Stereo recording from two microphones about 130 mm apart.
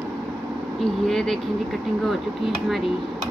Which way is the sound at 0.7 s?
5° left (ahead or behind).